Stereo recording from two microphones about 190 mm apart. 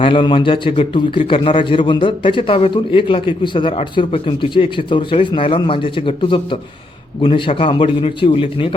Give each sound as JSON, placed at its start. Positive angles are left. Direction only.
{"t": 0.0, "sound": "a man's voice", "side_deg": 25}